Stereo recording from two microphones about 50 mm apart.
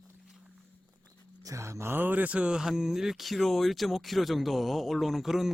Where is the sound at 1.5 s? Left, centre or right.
Right.